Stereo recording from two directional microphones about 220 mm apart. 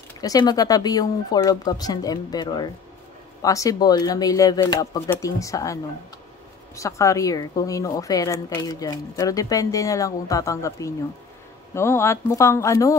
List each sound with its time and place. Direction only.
0.2 s speech: 20° left (ahead or behind)